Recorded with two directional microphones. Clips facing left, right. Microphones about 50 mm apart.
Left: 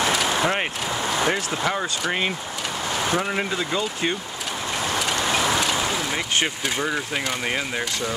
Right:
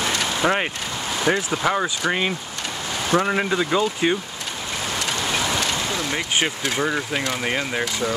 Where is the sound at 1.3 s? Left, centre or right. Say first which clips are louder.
Right 3 dB; centre.